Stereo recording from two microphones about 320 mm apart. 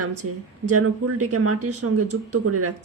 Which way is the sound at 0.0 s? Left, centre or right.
Right.